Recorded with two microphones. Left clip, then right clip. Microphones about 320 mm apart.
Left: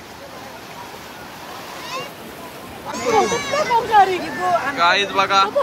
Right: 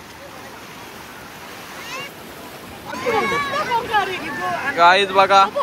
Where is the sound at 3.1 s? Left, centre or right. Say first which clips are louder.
Left 3 dB; left.